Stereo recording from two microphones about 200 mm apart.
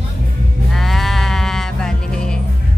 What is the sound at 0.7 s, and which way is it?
Sheep, centre (ahead or behind).